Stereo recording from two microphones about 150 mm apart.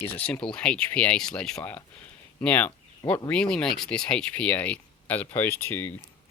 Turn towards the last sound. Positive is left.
turn(degrees=15)  # may be behind; listen again after turning